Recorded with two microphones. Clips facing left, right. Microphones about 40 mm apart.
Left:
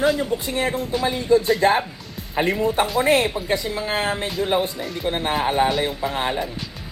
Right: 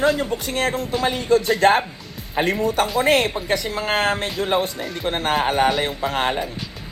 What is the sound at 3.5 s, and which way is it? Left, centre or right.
Speech, right.